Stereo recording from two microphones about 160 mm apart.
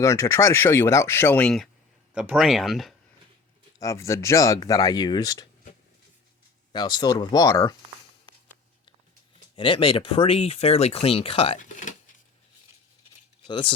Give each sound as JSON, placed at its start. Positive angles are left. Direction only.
{"t": 0.0, "sound": "speech", "side_deg": 20}
{"t": 3.8, "sound": "speech", "side_deg": 20}
{"t": 6.7, "sound": "speech", "side_deg": 30}
{"t": 9.6, "sound": "speech", "side_deg": 35}
{"t": 11.6, "sound": "a sound", "side_deg": 55}
{"t": 13.5, "sound": "speech", "side_deg": 30}